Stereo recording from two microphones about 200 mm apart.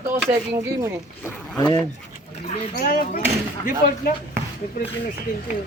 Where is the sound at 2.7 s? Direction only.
50° left (ahead or behind).